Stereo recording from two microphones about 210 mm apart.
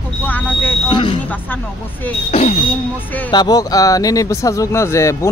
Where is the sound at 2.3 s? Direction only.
30° left (ahead or behind).